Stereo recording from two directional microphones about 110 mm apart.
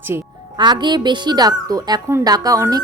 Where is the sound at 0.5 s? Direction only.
40° right (ahead or behind).